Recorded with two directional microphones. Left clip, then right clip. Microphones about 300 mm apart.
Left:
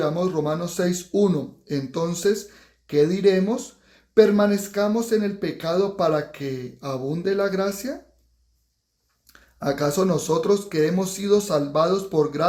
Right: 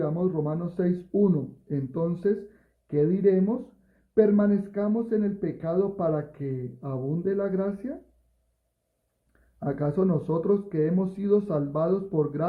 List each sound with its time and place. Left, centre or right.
0.0 s speech: centre
9.6 s speech: centre